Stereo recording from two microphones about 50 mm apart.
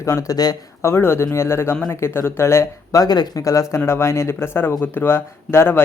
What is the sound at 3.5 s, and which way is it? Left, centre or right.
Speech, left.